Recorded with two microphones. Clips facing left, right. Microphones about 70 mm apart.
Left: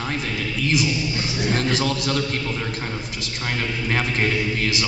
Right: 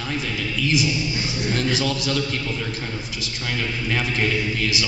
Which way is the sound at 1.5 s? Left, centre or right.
Left.